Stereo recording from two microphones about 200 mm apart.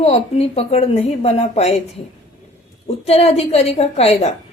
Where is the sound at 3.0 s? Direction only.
30° left (ahead or behind).